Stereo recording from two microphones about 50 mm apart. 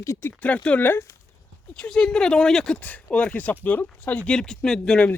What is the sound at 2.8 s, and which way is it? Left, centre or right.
Speech, left.